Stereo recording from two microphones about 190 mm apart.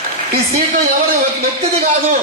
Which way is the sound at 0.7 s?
55° right (ahead or behind).